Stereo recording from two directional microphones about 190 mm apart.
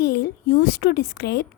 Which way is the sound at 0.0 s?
60° left (ahead or behind).